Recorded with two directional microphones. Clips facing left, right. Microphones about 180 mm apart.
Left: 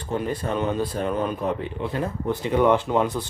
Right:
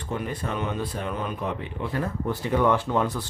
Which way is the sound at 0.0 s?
35° left (ahead or behind).